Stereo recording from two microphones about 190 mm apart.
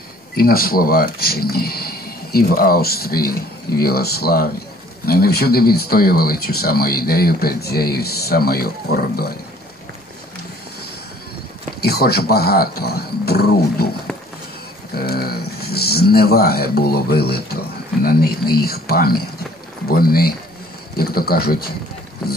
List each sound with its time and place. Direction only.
0.4 s speech: 50° left (ahead or behind)
11.8 s speech: 55° left (ahead or behind)
15.0 s speech: 55° left (ahead or behind)